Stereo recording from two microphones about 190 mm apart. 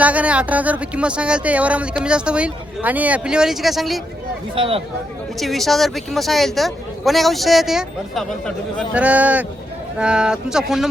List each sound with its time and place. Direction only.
0.0 s speech: 5° right (ahead or behind)
4.5 s speech: 30° right (ahead or behind)
5.4 s speech: centre (ahead or behind)